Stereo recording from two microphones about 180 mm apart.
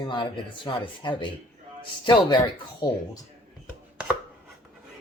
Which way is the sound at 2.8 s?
25° left (ahead or behind).